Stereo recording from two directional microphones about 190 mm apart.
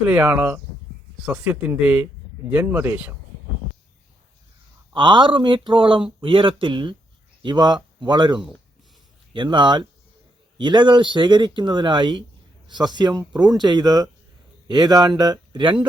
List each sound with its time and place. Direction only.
0.0 s speech: 5° right (ahead or behind)
4.9 s speech: 25° right (ahead or behind)